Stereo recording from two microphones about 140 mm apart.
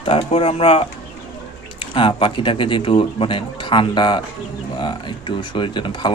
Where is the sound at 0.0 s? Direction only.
40° left (ahead or behind).